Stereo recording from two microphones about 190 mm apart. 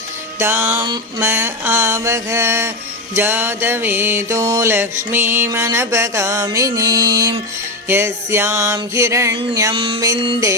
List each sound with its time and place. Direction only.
0.3 s mantra: 10° right (ahead or behind)
9.7 s mantra: 30° right (ahead or behind)